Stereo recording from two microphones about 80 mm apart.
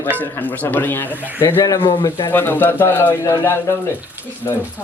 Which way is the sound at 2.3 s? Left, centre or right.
Left.